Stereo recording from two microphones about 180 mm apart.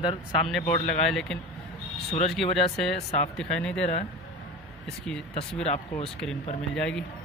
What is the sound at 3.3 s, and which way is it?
Speech, 5° left (ahead or behind).